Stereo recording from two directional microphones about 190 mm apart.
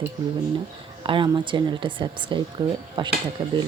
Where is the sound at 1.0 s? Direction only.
25° right (ahead or behind).